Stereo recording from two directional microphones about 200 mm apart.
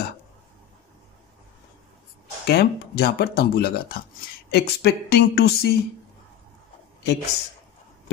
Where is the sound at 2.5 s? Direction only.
50° left (ahead or behind).